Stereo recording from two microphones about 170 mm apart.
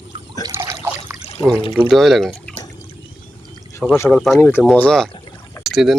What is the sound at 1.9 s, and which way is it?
Speech, centre (ahead or behind).